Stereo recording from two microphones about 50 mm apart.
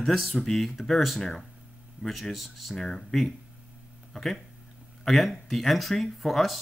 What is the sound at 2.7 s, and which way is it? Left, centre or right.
Speech, centre.